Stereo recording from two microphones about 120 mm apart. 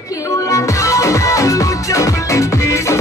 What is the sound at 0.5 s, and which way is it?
Music, 25° left (ahead or behind).